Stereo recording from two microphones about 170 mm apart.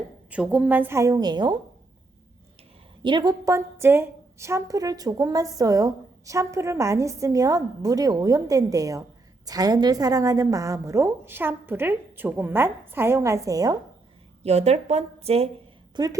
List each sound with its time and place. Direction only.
0.3 s a woman's voice: 10° right (ahead or behind); by 1.5 s 25° right (ahead or behind)
3.0 s a woman's voice: 25° right (ahead or behind)
14.4 s speech: 40° right (ahead or behind)
16.0 s a woman's voice: 25° right (ahead or behind)